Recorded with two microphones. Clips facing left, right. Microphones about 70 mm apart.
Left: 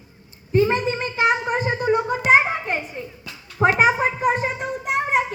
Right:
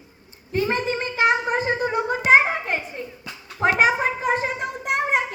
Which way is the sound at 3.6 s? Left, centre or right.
Centre.